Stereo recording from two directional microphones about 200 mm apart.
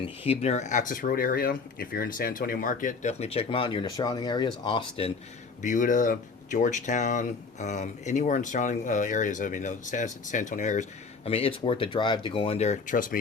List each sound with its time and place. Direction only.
0.3 s speech: 35° left (ahead or behind)
5.6 s speech: 40° left (ahead or behind)
11.3 s speech: 30° left (ahead or behind)